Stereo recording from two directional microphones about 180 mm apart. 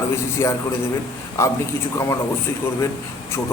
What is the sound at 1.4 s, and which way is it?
Speech, 15° left (ahead or behind).